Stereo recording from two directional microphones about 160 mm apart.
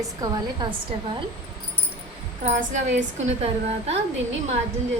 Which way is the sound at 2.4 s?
50° right (ahead or behind).